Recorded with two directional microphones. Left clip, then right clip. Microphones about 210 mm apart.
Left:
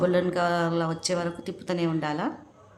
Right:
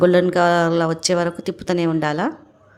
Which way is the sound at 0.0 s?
35° right (ahead or behind).